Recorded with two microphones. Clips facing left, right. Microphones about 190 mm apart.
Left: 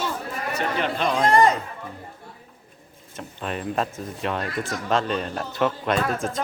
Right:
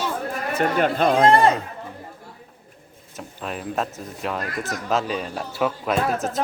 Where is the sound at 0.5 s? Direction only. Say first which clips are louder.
Right 5 dB; 50° right (ahead or behind).